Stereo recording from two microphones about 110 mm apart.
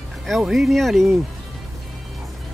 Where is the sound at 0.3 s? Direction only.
Centre (ahead or behind).